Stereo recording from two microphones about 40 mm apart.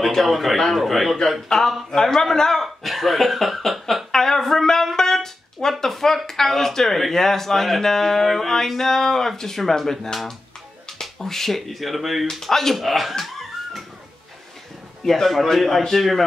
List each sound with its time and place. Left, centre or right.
0.0 s a man's voice: centre
1.5 s a man's voice: centre
2.6 s speech: centre
11.0 s speech: centre
13.2 s dog: centre
15.0 s speech: centre